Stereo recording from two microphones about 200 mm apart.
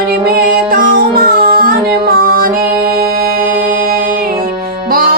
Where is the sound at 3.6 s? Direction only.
45° right (ahead or behind).